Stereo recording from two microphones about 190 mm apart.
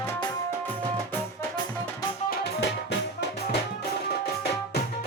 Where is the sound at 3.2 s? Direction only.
55° left (ahead or behind).